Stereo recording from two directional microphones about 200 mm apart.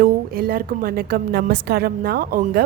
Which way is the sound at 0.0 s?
50° right (ahead or behind).